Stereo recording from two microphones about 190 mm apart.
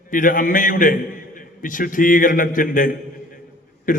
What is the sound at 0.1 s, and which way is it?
A man's voice, 45° left (ahead or behind).